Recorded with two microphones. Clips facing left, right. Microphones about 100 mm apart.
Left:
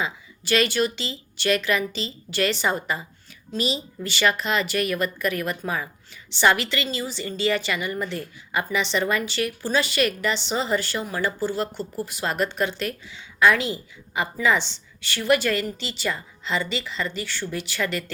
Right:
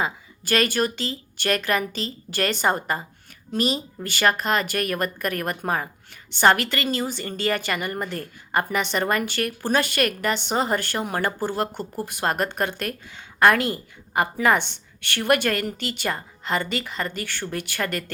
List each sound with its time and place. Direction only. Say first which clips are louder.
0.0 s a woman's voice: right 2 dB; 45° right (ahead or behind)